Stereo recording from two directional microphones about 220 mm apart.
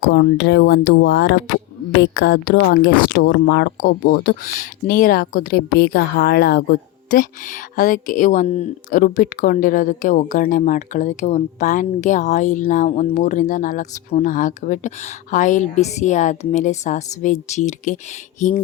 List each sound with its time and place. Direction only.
0.1 s speech: 50° left (ahead or behind)
7.8 s speech: 35° left (ahead or behind)